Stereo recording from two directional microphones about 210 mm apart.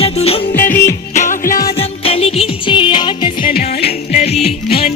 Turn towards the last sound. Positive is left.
turn(degrees=30)  # may be behind; listen again after turning